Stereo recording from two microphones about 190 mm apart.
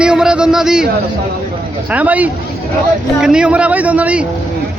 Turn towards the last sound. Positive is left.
turn(degrees=-5)  # may be behind; listen again after turning